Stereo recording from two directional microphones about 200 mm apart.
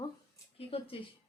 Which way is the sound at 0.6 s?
30° left (ahead or behind).